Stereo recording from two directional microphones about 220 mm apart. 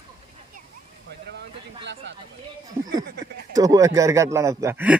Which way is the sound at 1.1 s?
50° right (ahead or behind).